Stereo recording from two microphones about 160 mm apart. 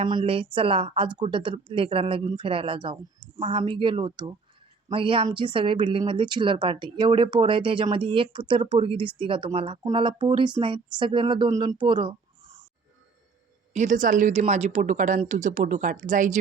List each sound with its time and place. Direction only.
0.0 s a woman's voice: 35° right (ahead or behind)
13.7 s a woman's voice: 50° right (ahead or behind)